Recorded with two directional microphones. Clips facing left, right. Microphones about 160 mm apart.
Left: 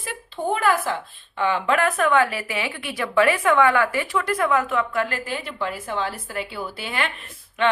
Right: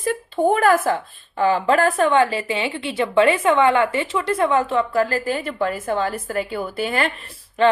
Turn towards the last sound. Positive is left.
turn(degrees=-35)  # may be behind; listen again after turning